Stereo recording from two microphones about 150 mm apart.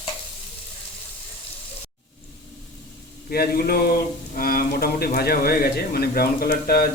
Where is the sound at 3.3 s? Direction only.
85° left.